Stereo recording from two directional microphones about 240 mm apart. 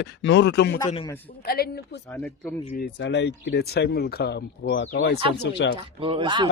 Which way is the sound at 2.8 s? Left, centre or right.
Left.